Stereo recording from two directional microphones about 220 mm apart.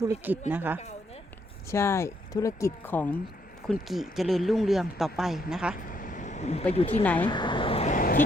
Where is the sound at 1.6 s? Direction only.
10° left (ahead or behind); by 5.7 s 5° right (ahead or behind).